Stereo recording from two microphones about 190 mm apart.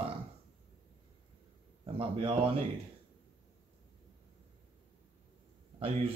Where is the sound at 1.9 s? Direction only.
30° right (ahead or behind).